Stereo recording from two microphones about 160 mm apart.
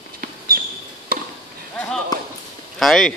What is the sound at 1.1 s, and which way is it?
Chop, 70° right (ahead or behind).